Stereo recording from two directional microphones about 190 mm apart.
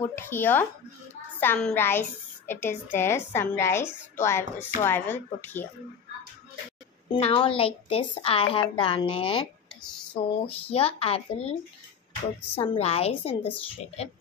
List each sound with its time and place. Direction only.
0.0 s a woman's voice: 10° left (ahead or behind)
7.1 s a woman's voice: 30° left (ahead or behind)
12.5 s speech: 30° left (ahead or behind)